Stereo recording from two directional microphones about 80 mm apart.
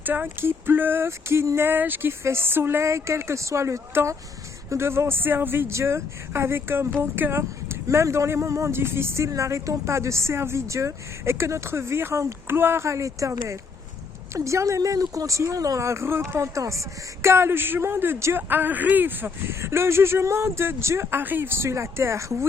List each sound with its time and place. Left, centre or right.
0.0 s speech: right